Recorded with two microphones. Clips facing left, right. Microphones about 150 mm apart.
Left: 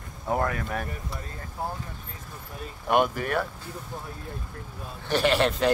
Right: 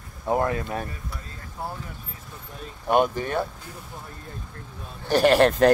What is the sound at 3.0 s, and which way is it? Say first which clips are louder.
Speech: right 2 dB; 30° right (ahead or behind).